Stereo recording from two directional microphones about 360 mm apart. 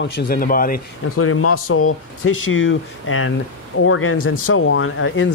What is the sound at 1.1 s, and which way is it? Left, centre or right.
Speech, left.